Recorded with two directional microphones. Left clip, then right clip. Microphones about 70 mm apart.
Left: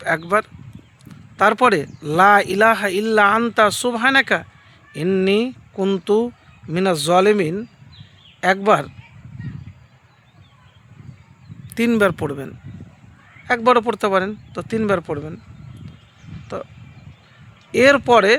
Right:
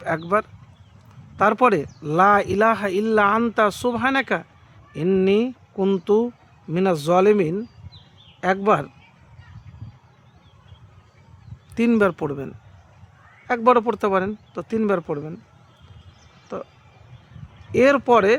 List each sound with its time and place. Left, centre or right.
0.0 s speech: centre
11.7 s speech: centre
16.6 s speech: left